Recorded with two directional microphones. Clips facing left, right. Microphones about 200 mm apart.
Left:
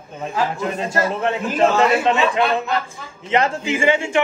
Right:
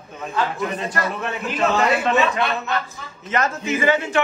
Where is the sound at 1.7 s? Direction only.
Centre (ahead or behind).